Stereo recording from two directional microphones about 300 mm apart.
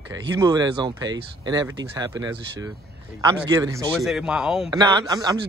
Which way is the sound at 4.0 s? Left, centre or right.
Centre.